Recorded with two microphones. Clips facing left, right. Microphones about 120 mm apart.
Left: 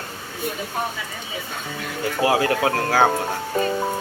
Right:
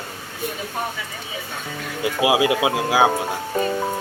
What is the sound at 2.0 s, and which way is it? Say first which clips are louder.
Speech: right 1 dB; 10° right (ahead or behind).